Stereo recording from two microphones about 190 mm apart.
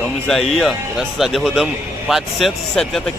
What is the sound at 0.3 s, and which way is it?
Speech, centre (ahead or behind).